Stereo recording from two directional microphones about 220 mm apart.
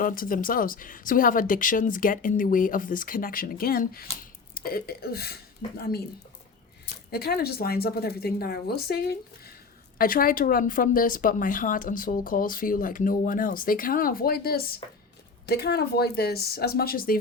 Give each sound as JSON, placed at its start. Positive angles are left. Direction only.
{"t": 0.0, "sound": "speech", "side_deg": 40}
{"t": 7.1, "sound": "a woman's voice", "side_deg": 45}